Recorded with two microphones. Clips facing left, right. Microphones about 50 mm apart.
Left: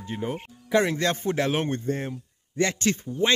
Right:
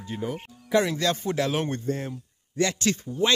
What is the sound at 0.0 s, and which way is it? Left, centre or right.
Speech, left.